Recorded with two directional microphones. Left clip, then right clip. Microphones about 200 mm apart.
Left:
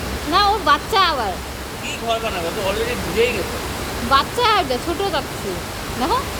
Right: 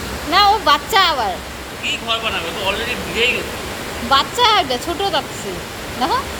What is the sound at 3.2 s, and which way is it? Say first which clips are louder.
Speech: right 2 dB; 40° left (ahead or behind).